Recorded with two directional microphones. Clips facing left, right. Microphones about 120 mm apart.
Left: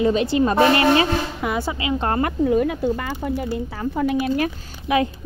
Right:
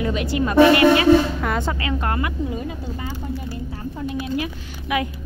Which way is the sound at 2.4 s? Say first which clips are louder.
Left 9 dB; 70° left (ahead or behind).